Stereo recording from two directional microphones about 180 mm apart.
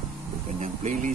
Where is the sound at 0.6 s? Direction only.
45° right (ahead or behind).